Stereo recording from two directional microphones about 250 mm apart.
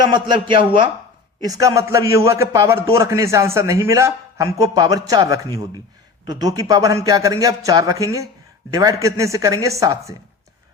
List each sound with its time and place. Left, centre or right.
0.0 s a man's voice: centre